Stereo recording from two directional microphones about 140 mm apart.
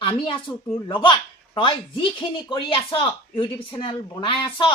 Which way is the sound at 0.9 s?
35° left (ahead or behind).